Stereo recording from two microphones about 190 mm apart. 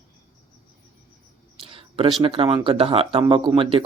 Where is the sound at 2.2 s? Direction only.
30° right (ahead or behind).